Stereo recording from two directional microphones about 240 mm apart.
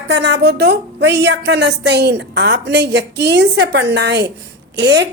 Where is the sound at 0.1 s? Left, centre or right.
Right.